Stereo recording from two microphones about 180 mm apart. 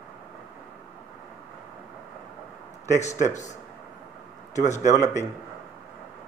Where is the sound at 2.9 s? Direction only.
40° left (ahead or behind).